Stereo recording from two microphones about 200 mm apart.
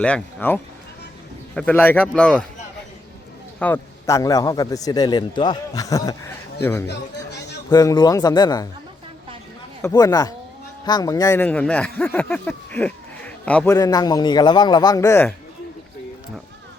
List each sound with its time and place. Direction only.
0.0 s a man's voice: 5° left (ahead or behind)
3.6 s a man's voice: 10° left (ahead or behind)
9.8 s a man's voice: 20° left (ahead or behind)
13.7 s a man's voice: 20° left (ahead or behind)